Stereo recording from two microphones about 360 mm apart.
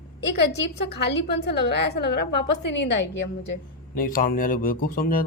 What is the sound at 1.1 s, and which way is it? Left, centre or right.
A woman's voice, left.